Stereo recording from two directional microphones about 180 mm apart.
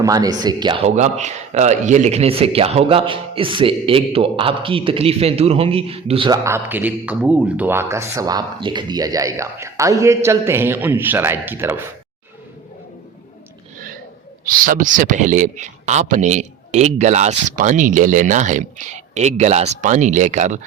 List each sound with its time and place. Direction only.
0.0 s speech: 20° right (ahead or behind)
0.9 s speech: 40° right (ahead or behind); by 11.8 s 10° right (ahead or behind)
14.4 s speech: 50° right (ahead or behind)